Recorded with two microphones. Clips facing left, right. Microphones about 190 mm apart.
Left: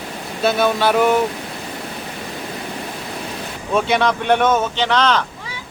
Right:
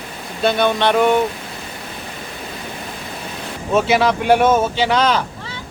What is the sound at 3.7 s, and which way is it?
Speech, 5° right (ahead or behind).